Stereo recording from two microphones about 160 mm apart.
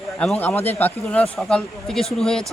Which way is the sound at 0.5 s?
40° left (ahead or behind).